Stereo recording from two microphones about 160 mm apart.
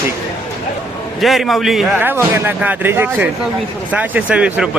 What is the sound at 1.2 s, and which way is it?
Speech, centre (ahead or behind).